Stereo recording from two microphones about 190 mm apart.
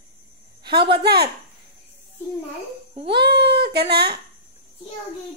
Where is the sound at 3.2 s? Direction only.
60° right (ahead or behind).